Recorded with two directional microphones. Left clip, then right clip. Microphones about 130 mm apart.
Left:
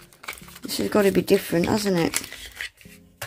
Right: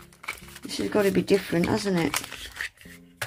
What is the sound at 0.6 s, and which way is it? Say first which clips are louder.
A woman's voice: left 3 dB; 25° left (ahead or behind).